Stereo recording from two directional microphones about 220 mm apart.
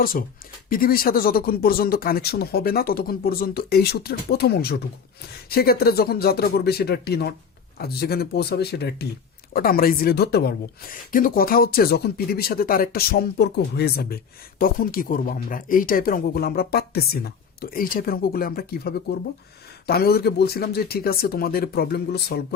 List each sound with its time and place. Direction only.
0.0 s speech: 40° left (ahead or behind)